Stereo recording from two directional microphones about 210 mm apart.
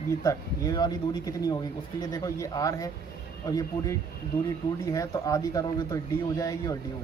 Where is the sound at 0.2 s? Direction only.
15° left (ahead or behind).